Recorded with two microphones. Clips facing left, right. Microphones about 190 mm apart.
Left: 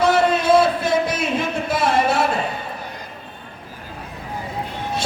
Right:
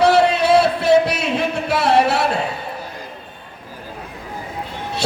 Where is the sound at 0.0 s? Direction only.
70° right (ahead or behind).